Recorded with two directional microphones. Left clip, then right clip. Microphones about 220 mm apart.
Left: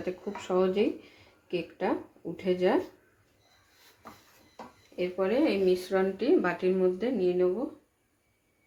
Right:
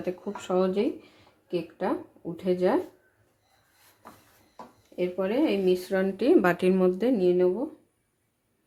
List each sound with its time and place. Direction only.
0.0 s speech: 25° right (ahead or behind)
4.9 s a woman's voice: 30° right (ahead or behind)